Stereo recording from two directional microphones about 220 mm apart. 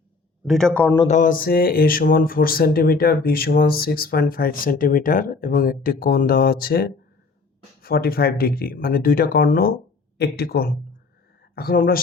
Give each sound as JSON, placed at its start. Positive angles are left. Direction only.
{"t": 0.4, "sound": "a man's voice", "side_deg": 0}
{"t": 0.9, "sound": "mantra", "side_deg": 30}
{"t": 7.8, "sound": "speech", "side_deg": 45}
{"t": 11.5, "sound": "mantra", "side_deg": 45}